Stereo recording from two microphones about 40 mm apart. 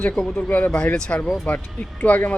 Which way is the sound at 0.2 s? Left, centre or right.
Left.